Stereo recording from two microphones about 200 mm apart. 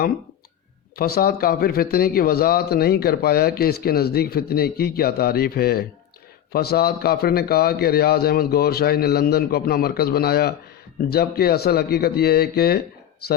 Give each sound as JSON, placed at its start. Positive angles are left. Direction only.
{"t": 0.9, "sound": "speech", "side_deg": 50}